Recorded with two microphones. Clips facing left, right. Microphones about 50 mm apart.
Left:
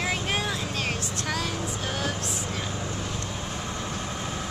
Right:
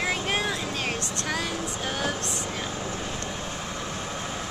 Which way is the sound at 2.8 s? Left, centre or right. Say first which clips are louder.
Right 1 dB; right.